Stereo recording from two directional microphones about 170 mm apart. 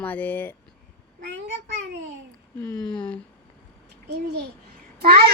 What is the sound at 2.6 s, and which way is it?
Speech, 25° left (ahead or behind).